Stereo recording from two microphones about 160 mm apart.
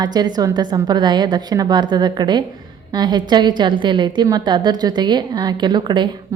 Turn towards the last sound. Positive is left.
turn(degrees=-30)  # may be behind; listen again after turning